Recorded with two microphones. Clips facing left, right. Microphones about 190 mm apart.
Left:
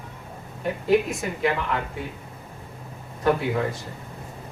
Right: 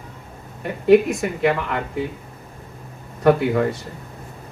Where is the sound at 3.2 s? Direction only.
70° right (ahead or behind).